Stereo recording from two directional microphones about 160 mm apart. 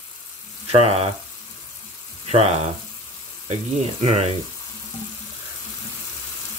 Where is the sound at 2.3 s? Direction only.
40° right (ahead or behind).